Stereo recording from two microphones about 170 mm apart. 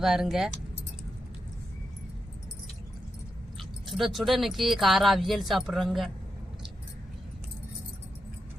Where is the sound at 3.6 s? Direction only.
Centre (ahead or behind).